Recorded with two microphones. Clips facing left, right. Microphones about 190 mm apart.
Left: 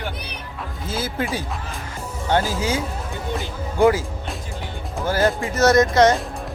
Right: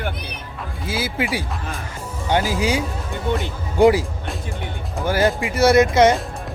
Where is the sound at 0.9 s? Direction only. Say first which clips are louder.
Right 2 dB; 10° right (ahead or behind).